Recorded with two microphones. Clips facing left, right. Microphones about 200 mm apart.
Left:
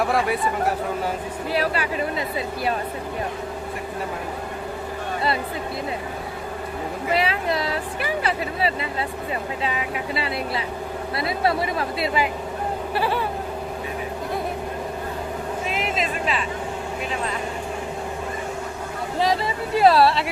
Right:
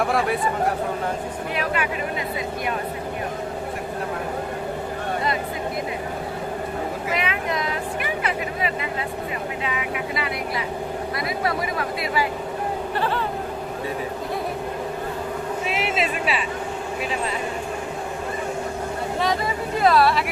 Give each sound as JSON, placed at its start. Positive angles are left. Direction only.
{"t": 0.0, "sound": "speech", "side_deg": 0}
{"t": 1.5, "sound": "speech", "side_deg": 35}
{"t": 7.1, "sound": "speech", "side_deg": 35}
{"t": 8.2, "sound": "vehicle", "side_deg": 30}
{"t": 9.6, "sound": "speech", "side_deg": 30}
{"t": 12.9, "sound": "speech", "side_deg": 10}
{"t": 15.7, "sound": "vehicle", "side_deg": -5}
{"t": 19.8, "sound": "speech", "side_deg": 30}